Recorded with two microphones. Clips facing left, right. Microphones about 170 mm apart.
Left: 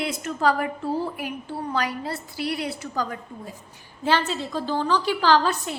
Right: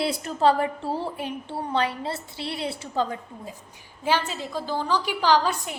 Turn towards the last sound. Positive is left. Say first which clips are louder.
# left 1 dB
turn(degrees=-15)  # may be behind; listen again after turning